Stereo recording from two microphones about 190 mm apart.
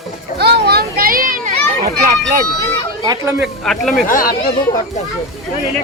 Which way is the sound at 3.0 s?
20° right (ahead or behind).